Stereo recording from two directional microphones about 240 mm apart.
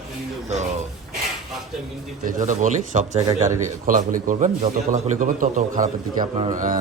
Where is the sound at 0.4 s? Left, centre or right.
Right.